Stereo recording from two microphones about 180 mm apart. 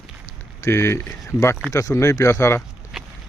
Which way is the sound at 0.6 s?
15° left (ahead or behind).